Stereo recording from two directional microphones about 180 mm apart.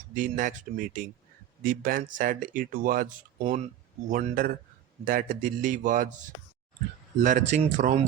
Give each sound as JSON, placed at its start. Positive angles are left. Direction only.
{"t": 0.1, "sound": "speech", "side_deg": -45}